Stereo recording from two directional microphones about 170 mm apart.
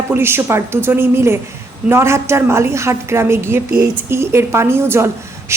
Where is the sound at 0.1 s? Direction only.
15° right (ahead or behind).